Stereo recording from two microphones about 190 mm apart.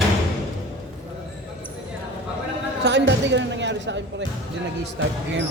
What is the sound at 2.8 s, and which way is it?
A woman's voice, 65° right (ahead or behind).